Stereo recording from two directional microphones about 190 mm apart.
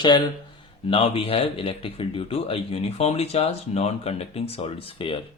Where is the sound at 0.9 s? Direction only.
30° left (ahead or behind).